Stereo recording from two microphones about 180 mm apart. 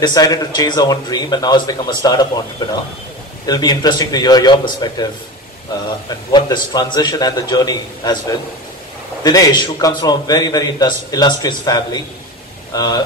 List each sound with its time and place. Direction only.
0.0 s a man's voice: 20° left (ahead or behind)